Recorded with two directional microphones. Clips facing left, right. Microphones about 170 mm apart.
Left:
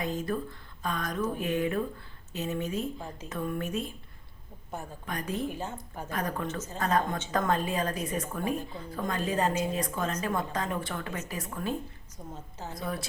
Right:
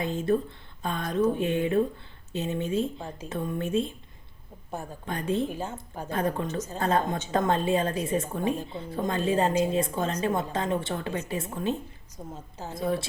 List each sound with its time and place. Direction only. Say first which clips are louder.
0.0 s a woman's voice: right 5 dB; 25° right (ahead or behind)
5.0 s a woman's voice: right 5 dB; 30° right (ahead or behind)
12.2 s a woman's voice: right 3 dB; 15° right (ahead or behind)
12.7 s a woman's voice: right 7 dB; 25° right (ahead or behind)